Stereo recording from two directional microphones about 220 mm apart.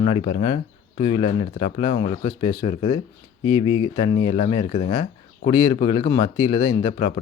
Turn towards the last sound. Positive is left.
turn(degrees=20)  # may be behind; listen again after turning